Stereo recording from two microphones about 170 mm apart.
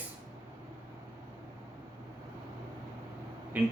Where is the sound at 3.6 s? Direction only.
10° right (ahead or behind).